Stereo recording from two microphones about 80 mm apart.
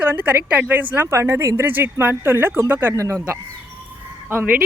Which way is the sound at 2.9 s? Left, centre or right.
Right.